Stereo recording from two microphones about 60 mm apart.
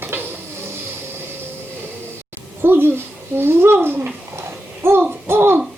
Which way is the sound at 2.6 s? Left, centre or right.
Right.